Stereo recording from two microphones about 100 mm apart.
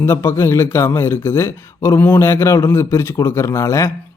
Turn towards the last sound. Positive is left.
turn(degrees=30)  # may be behind; listen again after turning